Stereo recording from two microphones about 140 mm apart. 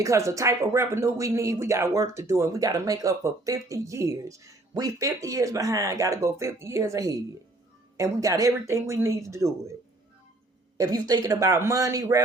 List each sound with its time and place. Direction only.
0.0 s speech: 20° right (ahead or behind)
10.8 s speech: 25° right (ahead or behind)